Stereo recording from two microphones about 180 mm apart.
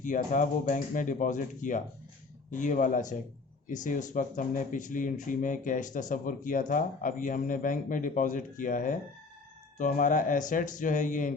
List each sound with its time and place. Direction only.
0.0 s speech: 45° left (ahead or behind)